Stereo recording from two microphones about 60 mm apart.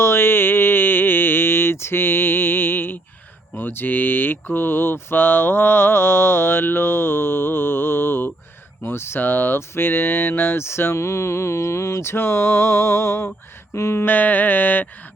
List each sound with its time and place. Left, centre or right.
0.0 s a sound: left
3.6 s mantra: left
8.8 s speech: left
14.0 s mantra: left